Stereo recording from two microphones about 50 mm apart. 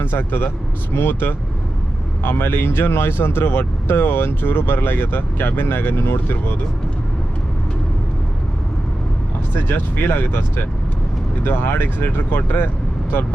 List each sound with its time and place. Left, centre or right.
0.0 s speech: left
9.6 s speech: left
11.4 s speech: left